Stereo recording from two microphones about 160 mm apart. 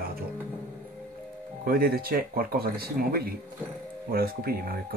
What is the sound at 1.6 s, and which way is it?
Speech, 70° right (ahead or behind).